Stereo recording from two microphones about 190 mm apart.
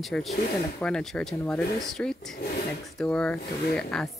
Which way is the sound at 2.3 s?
45° left (ahead or behind).